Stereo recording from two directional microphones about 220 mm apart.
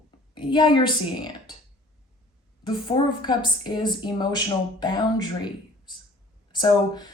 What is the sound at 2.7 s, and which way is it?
A woman's voice, 20° left (ahead or behind).